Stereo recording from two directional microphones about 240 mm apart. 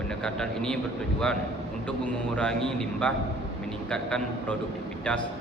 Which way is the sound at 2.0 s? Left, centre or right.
Centre.